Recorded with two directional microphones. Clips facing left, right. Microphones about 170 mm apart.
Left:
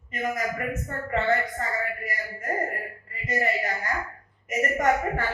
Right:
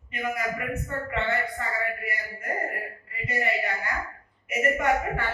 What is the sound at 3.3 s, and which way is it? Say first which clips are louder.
A woman's voice: left 1 dB; 40° left (ahead or behind).